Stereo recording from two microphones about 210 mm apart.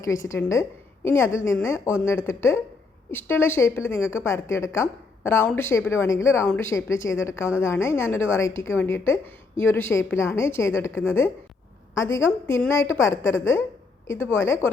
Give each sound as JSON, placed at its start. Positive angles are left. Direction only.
{"t": 0.0, "sound": "a woman's voice", "side_deg": 15}
{"t": 13.2, "sound": "a woman's voice", "side_deg": 65}
{"t": 14.4, "sound": "a woman's voice", "side_deg": 10}